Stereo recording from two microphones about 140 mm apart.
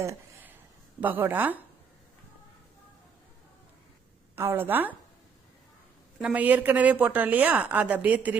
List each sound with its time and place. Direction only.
0.0 s a sound: 20° right (ahead or behind)
1.0 s speech: 15° right (ahead or behind)
4.4 s speech: 15° right (ahead or behind)
6.2 s speech: 10° right (ahead or behind)